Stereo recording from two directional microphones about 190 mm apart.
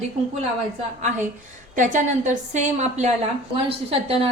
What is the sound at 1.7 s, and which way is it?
Speech, 40° right (ahead or behind).